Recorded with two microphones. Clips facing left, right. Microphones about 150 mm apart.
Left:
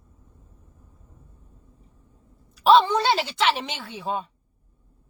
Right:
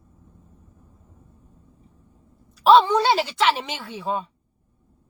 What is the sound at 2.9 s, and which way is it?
Speech, 10° right (ahead or behind).